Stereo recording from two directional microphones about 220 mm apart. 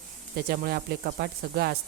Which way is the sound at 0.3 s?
45° right (ahead or behind).